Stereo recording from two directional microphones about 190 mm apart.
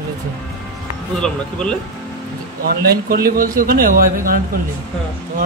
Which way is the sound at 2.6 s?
55° right (ahead or behind).